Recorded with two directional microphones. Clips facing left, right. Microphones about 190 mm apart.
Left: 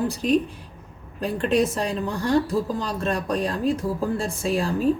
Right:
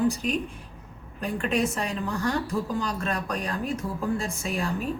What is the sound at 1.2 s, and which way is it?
A woman's voice, 35° left (ahead or behind).